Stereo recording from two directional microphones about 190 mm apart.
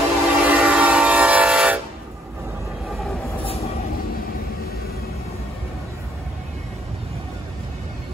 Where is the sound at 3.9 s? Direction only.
50° left (ahead or behind).